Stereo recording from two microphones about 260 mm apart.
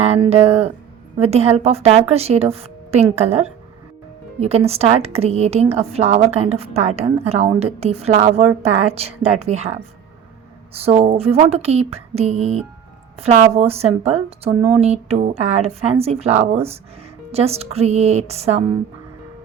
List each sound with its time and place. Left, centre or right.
0.0 s a woman's voice: right
10.8 s a woman's voice: right